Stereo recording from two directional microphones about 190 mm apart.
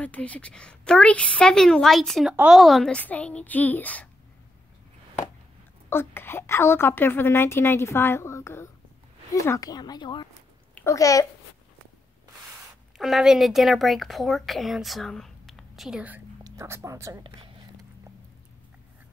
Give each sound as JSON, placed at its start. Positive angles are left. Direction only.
{"t": 0.0, "sound": "a woman's voice", "side_deg": 5}
{"t": 5.9, "sound": "a woman's voice", "side_deg": 10}
{"t": 12.9, "sound": "a woman's voice", "side_deg": 0}